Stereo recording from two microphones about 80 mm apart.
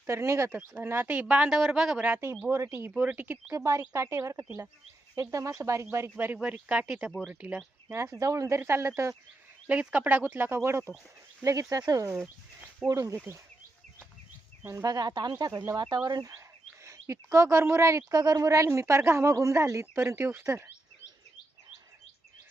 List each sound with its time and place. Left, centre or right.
0.1 s speech: right; by 2.0 s centre
2.0 s speech: right
3.5 s speech: right
4.4 s speech: right
5.1 s speech: right
6.4 s speech: centre
7.9 s speech: right
9.6 s speech: centre; by 10.9 s right
11.7 s speech: right
14.8 s speech: right
16.8 s speech: right